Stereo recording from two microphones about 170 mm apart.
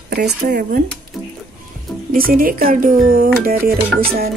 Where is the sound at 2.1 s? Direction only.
55° right (ahead or behind).